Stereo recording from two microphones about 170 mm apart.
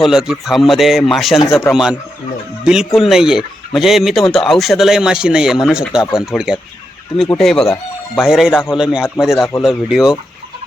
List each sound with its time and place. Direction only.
0.0 s speech: centre (ahead or behind)